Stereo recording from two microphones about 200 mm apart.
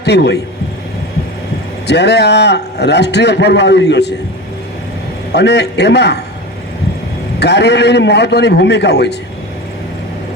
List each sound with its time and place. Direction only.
0.0 s a man's voice: 55° left (ahead or behind)
1.9 s a man's voice: 55° left (ahead or behind)
5.3 s a man's voice: 55° left (ahead or behind)
7.3 s a man's voice: 55° left (ahead or behind)